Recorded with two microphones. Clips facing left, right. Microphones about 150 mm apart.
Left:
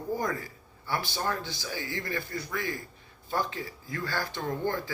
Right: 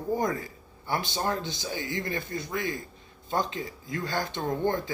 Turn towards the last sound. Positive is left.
turn(degrees=-20)  # may be behind; listen again after turning